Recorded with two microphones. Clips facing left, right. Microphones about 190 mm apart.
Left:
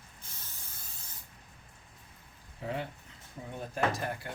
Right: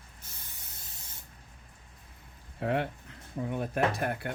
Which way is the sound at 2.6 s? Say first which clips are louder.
Right 7 dB; 65° right (ahead or behind).